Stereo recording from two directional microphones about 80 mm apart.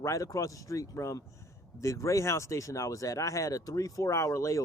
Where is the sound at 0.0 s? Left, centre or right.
Left.